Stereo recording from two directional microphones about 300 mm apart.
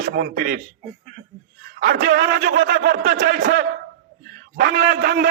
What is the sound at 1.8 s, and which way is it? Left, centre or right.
A man's voice, right.